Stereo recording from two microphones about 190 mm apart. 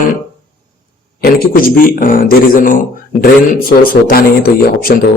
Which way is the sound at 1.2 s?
55° left (ahead or behind).